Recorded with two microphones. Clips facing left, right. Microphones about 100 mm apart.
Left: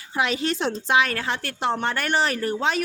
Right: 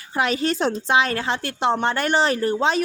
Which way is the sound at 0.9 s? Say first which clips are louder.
Even; 25° right (ahead or behind).